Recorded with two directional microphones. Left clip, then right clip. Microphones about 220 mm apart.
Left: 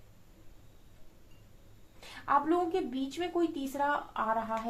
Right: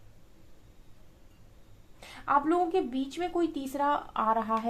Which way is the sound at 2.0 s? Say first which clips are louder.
Right 2 dB; 45° right (ahead or behind).